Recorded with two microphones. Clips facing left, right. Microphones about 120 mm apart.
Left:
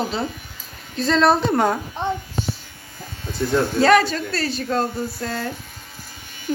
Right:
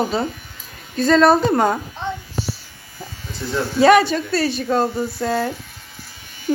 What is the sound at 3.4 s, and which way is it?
Speech, 60° left (ahead or behind).